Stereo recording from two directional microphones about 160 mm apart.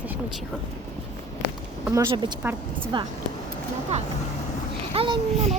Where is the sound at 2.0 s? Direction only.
30° right (ahead or behind).